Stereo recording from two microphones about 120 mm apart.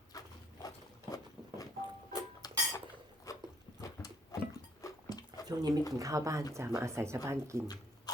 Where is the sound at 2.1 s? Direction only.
30° left (ahead or behind).